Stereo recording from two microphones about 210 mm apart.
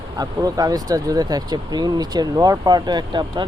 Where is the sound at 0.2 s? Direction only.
20° right (ahead or behind).